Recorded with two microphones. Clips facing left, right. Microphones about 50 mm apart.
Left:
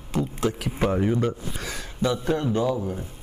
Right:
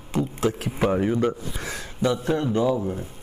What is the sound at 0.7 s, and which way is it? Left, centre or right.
Speech, centre.